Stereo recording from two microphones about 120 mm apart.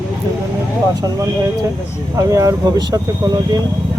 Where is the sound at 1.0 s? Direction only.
30° right (ahead or behind).